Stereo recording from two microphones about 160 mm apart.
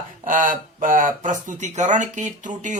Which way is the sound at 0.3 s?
55° right (ahead or behind).